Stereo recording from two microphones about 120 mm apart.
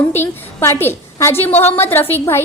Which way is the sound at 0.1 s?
20° left (ahead or behind).